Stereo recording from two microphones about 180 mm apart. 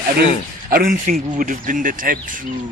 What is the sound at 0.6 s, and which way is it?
Speech, 50° right (ahead or behind).